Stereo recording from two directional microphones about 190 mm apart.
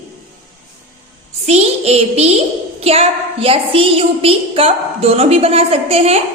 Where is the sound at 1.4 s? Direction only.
35° right (ahead or behind).